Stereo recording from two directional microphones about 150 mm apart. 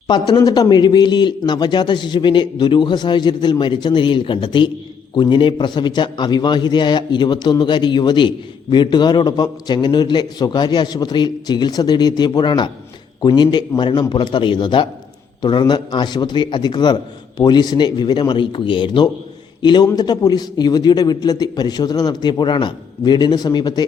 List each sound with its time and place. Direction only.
0.1 s a man's voice: 30° left (ahead or behind)